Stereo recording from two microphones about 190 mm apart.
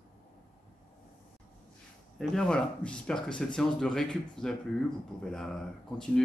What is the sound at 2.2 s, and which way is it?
Speech, 5° left (ahead or behind).